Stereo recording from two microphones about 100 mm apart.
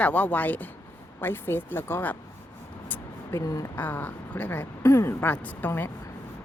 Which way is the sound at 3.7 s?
20° left (ahead or behind).